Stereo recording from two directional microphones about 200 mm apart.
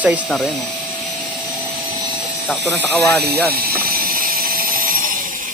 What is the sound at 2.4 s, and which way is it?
Speech, centre (ahead or behind).